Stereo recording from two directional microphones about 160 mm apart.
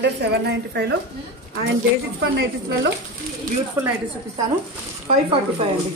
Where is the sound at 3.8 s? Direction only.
15° right (ahead or behind).